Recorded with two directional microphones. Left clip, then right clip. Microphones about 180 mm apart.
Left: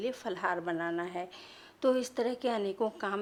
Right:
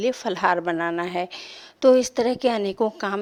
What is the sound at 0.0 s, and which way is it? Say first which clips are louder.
A woman's voice: right 12 dB; 40° right (ahead or behind).